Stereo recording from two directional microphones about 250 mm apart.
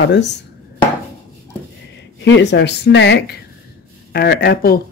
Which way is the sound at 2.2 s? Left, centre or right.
Left.